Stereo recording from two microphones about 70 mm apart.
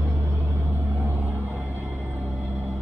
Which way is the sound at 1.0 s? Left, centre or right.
Right.